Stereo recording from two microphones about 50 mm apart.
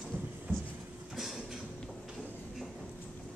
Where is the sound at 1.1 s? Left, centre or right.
Centre.